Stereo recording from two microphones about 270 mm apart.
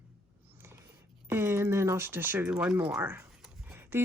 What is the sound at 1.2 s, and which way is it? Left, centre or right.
Speech, centre.